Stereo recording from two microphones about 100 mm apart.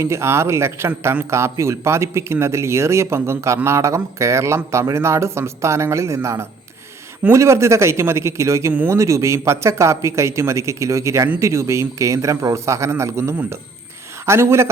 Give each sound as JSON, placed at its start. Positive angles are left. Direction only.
{"t": 0.0, "sound": "speech", "side_deg": -25}
{"t": 13.3, "sound": "speech", "side_deg": -15}